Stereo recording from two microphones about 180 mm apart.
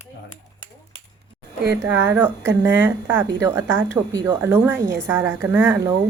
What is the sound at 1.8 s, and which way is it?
Speech, 10° right (ahead or behind).